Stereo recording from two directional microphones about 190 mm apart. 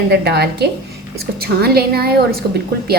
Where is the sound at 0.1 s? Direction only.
60° right (ahead or behind).